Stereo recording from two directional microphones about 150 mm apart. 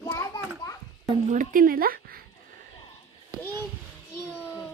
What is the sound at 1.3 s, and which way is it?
Speech, 60° right (ahead or behind).